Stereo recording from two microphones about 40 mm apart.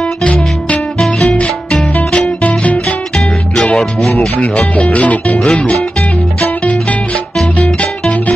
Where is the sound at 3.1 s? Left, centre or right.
Centre.